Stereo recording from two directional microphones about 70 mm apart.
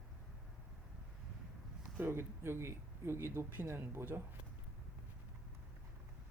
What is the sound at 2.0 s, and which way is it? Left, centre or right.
Speech, right.